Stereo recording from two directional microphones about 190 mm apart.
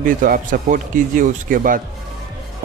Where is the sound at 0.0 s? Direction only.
45° right (ahead or behind).